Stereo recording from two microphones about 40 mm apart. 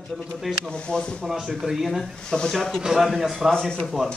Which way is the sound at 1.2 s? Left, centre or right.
Centre.